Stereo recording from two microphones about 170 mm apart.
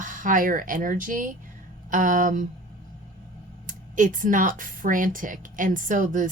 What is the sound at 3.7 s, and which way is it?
Speech, 50° right (ahead or behind).